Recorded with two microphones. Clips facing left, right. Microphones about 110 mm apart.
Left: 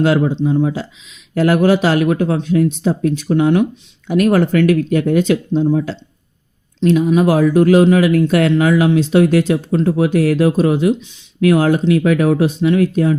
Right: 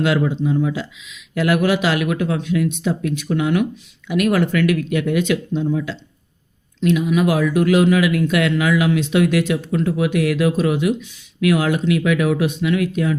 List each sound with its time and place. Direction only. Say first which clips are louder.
0.0 s speech: left 4 dB; 35° left (ahead or behind)